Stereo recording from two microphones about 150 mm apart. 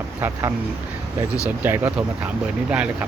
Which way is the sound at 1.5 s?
10° right (ahead or behind).